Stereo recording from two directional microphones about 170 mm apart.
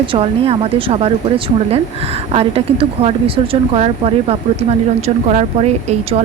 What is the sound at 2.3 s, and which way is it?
Speech, 35° right (ahead or behind).